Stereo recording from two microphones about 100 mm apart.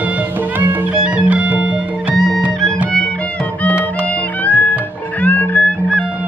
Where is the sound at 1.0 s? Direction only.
15° right (ahead or behind).